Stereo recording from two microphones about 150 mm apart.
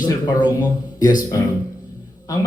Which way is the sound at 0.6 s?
25° left (ahead or behind).